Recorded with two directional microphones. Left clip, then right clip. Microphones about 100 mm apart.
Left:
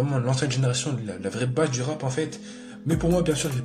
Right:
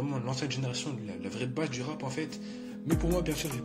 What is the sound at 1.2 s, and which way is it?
A man's voice, 35° right (ahead or behind).